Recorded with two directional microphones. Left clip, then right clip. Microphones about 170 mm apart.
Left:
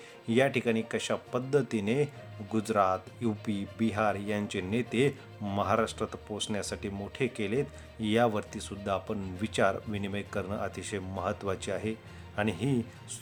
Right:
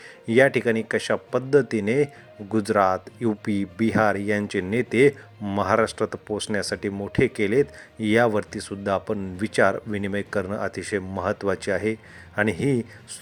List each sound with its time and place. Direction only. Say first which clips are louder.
0.3 s speech: right 9 dB; 30° right (ahead or behind)